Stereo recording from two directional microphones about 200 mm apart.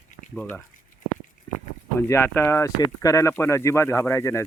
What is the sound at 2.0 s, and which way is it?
Speech, 15° left (ahead or behind).